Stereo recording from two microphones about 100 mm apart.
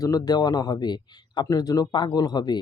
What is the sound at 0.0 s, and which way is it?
Speech, 35° left (ahead or behind).